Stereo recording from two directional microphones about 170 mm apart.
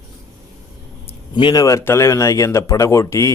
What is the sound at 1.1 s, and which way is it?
A man's voice, 30° left (ahead or behind).